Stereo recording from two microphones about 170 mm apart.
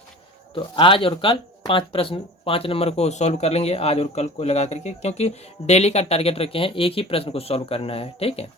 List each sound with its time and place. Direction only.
0.5 s speech: 30° left (ahead or behind)